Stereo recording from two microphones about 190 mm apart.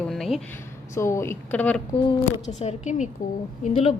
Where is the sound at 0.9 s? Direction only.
15° left (ahead or behind).